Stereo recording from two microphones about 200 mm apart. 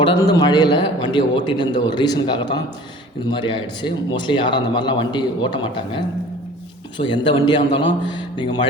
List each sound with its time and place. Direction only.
0.0 s a man's voice: 25° left (ahead or behind)
7.0 s a man's voice: 25° left (ahead or behind)